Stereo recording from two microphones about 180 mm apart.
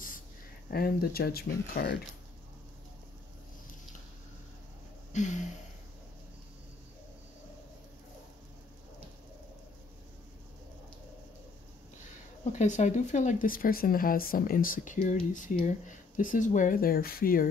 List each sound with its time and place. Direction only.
0.7 s speech: 60° left (ahead or behind)
5.1 s gasp: 40° left (ahead or behind)
12.5 s speech: 40° left (ahead or behind)